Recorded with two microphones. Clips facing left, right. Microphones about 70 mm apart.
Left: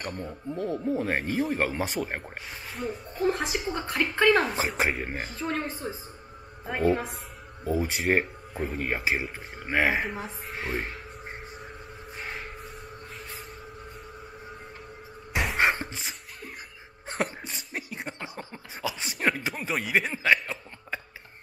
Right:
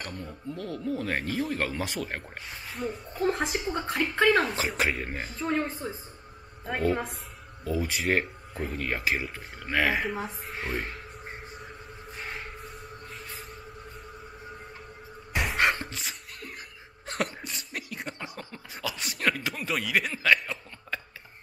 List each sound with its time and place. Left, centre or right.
0.0 s speech: centre
2.5 s speech: centre
7.6 s speech: centre
10.0 s speech: centre
11.5 s train: centre
15.3 s a sound: centre
15.6 s a sound: centre
17.0 s cough: left
17.7 s a sound: centre
19.1 s chuckle: centre